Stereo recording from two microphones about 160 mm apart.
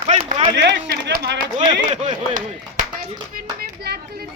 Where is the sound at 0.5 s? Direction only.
90° right.